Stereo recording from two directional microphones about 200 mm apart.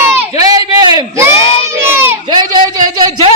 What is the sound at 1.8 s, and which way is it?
Crowd, 10° right (ahead or behind).